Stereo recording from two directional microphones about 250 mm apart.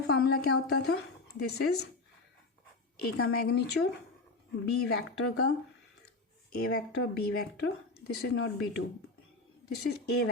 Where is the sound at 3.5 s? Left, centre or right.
Left.